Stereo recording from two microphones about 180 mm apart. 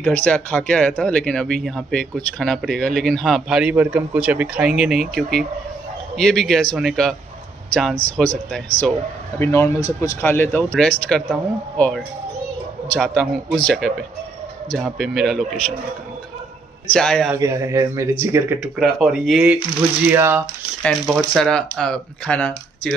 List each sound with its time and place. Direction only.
0.0 s speech: 10° left (ahead or behind)
16.9 s speech: 5° left (ahead or behind)
17.3 s speech: 15° right (ahead or behind)
18.8 s speech: centre (ahead or behind)
20.8 s speech: centre (ahead or behind)